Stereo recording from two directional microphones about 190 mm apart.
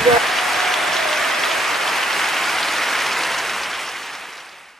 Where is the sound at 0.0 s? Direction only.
Centre (ahead or behind).